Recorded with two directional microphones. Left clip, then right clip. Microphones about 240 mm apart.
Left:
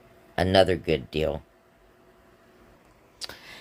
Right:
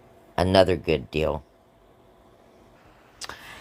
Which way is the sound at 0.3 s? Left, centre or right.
Centre.